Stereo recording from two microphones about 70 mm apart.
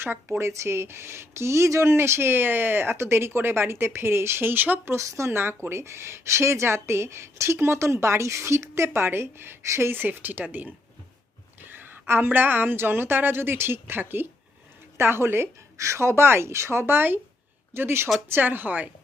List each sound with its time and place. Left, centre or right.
0.0 s speech: right
4.9 s a woman's voice: right